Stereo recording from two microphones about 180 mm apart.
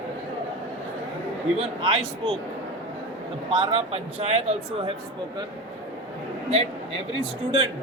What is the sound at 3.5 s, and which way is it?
Speech, 30° right (ahead or behind).